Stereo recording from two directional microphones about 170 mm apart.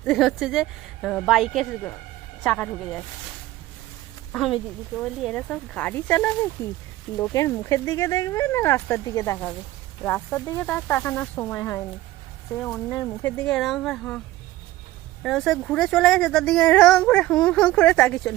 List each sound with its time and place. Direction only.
0.0 s speech: centre (ahead or behind)
4.3 s speech: centre (ahead or behind)
15.2 s speech: centre (ahead or behind)